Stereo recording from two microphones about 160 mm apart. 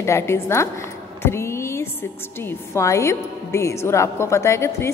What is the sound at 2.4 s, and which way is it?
A woman's voice, 20° left (ahead or behind).